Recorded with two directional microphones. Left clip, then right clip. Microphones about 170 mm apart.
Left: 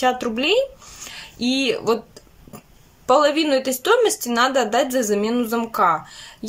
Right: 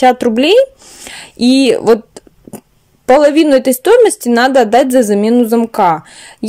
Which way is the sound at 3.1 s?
40° right (ahead or behind).